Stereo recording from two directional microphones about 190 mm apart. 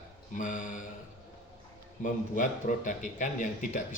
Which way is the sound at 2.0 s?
45° left (ahead or behind).